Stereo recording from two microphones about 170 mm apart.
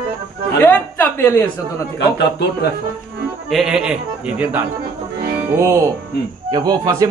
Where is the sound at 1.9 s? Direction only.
75° left (ahead or behind).